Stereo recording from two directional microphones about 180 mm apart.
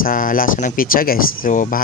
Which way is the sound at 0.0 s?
50° left (ahead or behind).